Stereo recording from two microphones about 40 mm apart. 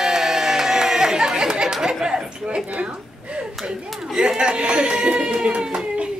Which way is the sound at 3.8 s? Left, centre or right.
Centre.